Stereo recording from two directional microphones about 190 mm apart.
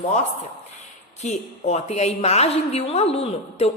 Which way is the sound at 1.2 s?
35° left (ahead or behind).